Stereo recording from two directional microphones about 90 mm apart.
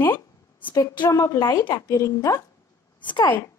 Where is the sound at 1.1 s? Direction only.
35° left (ahead or behind).